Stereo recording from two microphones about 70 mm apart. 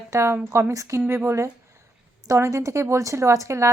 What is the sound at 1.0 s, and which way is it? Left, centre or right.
Speech, right.